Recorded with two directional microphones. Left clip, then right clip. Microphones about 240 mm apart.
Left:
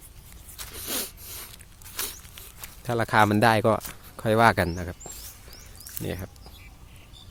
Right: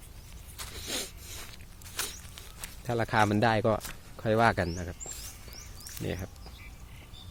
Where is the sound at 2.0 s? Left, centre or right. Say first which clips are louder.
Left 2 dB; centre.